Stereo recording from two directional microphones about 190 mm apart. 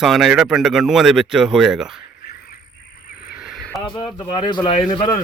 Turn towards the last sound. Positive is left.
turn(degrees=25)  # may be behind; listen again after turning